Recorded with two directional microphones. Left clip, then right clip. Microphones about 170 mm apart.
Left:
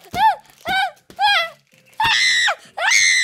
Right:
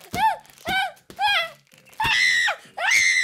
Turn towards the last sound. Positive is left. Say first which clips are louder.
# left 4 dB
turn(degrees=15)  # may be behind; listen again after turning